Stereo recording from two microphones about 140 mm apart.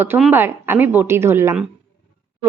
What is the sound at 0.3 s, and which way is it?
A woman's voice, 15° right (ahead or behind).